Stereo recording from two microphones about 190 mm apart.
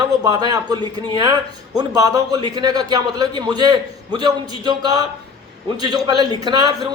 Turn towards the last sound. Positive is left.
turn(degrees=-20)  # may be behind; listen again after turning